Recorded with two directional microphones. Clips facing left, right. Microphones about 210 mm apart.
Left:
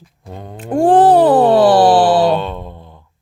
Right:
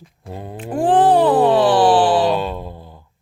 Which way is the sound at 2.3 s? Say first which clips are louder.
Left 2 dB; 5° right (ahead or behind).